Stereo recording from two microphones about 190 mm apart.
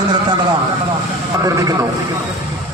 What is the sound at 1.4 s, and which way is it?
Speech, 20° right (ahead or behind).